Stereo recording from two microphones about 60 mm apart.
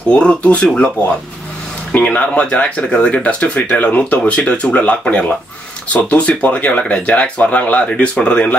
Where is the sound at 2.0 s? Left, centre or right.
Left.